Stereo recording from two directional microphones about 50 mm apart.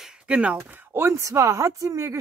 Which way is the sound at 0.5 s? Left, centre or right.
Right.